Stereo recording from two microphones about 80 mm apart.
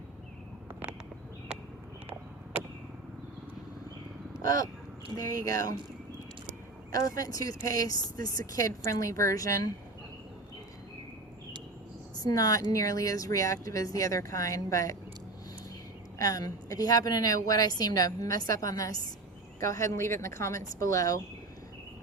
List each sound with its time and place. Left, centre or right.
4.4 s speech: left
6.9 s speech: left
12.2 s speech: left
16.1 s a woman's voice: left